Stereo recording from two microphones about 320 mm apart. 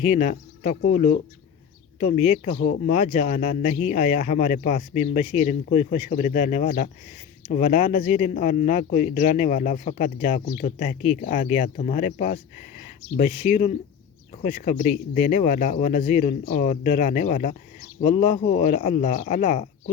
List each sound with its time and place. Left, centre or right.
0.1 s speech: left
2.0 s speech: left